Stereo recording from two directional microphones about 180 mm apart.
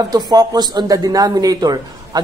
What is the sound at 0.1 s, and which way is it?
Speech, 20° right (ahead or behind).